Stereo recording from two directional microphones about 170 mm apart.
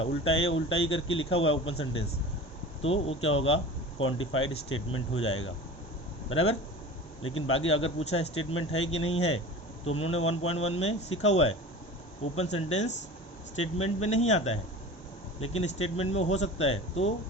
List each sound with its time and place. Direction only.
0.1 s speech: 35° left (ahead or behind)